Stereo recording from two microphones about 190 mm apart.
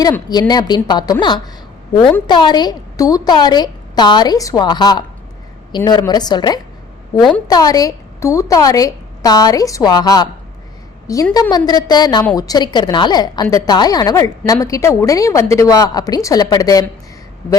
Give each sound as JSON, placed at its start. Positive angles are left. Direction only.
{"t": 0.3, "sound": "a woman's voice", "side_deg": 20}
{"t": 7.2, "sound": "a woman's voice", "side_deg": 0}
{"t": 7.4, "sound": "a woman's voice", "side_deg": 20}